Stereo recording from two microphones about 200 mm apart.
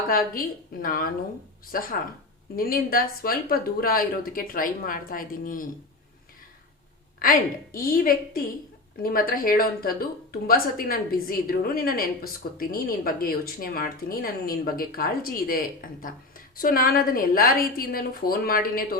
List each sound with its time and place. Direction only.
0.1 s speech: 45° left (ahead or behind)
7.2 s speech: 45° left (ahead or behind)